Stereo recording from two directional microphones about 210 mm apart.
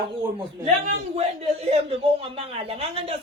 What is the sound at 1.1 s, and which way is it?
Speech, 30° right (ahead or behind).